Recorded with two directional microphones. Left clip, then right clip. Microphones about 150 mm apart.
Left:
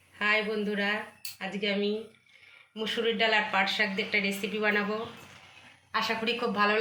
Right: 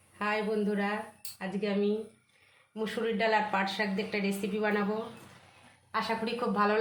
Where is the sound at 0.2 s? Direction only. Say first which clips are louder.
Left 3 dB; 55° right (ahead or behind).